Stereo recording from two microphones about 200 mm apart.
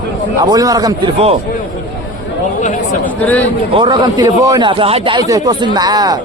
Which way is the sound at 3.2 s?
10° left (ahead or behind).